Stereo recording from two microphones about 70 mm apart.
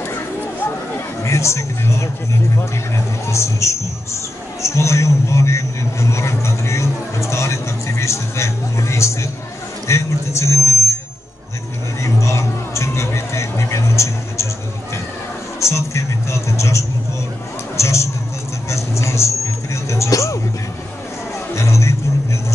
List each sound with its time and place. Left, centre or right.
0.0 s a sound: left
2.5 s a man's voice: left
12.0 s music: left
15.6 s speech: left
18.7 s vehicle: left
19.7 s music: left
21.5 s music: left